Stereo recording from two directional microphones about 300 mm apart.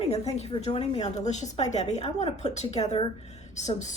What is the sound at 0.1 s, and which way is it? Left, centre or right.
A woman's voice, left.